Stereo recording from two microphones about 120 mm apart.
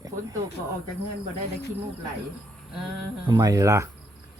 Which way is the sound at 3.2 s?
35° right (ahead or behind).